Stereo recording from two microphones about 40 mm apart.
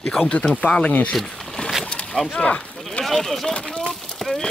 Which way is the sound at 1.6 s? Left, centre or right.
Left.